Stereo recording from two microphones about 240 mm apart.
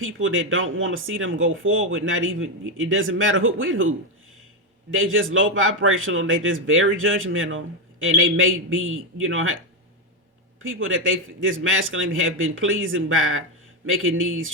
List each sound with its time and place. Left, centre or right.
0.0 s speech: right
10.6 s speech: right